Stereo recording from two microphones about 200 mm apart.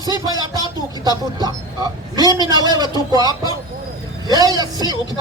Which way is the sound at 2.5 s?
20° right (ahead or behind).